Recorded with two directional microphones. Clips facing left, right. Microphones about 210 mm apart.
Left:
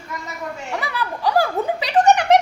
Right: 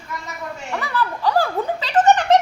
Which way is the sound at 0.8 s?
10° left (ahead or behind).